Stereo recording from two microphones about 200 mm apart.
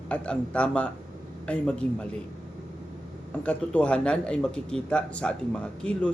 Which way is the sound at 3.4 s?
5° left (ahead or behind).